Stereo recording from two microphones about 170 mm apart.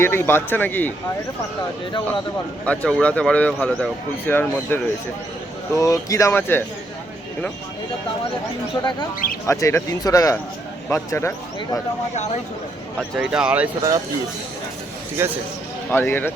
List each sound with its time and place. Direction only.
0.0 s speech: 15° left (ahead or behind)
2.6 s speech: 5° left (ahead or behind)
8.7 s speech: 25° left (ahead or behind)
13.0 s speech: 5° right (ahead or behind)
15.2 s speech: 15° right (ahead or behind)
15.9 s speech: 10° left (ahead or behind)